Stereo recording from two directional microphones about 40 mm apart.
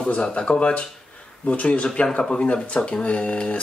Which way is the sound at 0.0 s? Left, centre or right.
Left.